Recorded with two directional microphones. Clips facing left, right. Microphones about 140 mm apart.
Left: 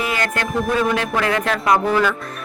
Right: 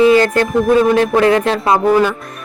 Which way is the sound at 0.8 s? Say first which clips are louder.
Right 9 dB; 30° right (ahead or behind).